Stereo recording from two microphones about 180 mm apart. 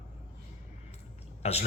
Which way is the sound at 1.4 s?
35° left (ahead or behind).